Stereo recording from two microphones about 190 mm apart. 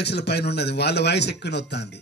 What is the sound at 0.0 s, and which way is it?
A man's voice, 60° left (ahead or behind).